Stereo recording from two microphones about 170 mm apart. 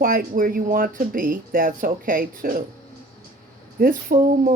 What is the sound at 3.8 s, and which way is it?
Speech, 55° right (ahead or behind).